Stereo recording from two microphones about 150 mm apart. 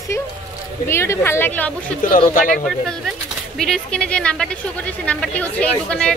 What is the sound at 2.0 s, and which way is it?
Speech, 65° left (ahead or behind).